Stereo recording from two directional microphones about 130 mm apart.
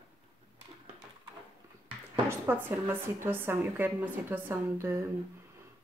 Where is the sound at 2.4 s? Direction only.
15° right (ahead or behind).